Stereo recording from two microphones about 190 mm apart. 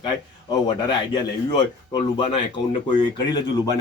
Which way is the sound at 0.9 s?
20° left (ahead or behind).